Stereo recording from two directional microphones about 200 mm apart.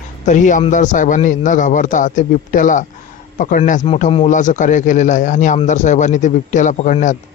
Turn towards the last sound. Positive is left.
turn(degrees=40)  # may be behind; listen again after turning